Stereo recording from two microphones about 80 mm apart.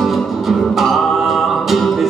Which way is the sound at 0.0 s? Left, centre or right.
Centre.